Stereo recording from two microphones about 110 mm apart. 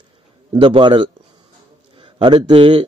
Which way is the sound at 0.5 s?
50° right (ahead or behind).